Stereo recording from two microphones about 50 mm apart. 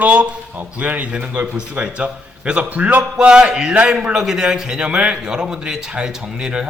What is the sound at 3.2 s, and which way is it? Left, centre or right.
A man's voice, centre.